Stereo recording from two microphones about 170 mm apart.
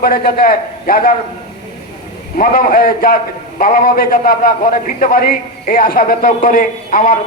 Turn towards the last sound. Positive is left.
turn(degrees=60)  # may be behind; listen again after turning